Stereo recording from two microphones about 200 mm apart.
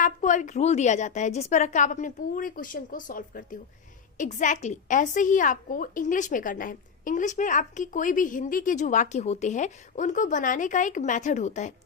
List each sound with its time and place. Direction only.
0.0 s a woman's voice: 40° left (ahead or behind)